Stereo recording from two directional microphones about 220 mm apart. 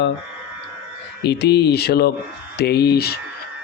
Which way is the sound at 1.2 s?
50° left (ahead or behind).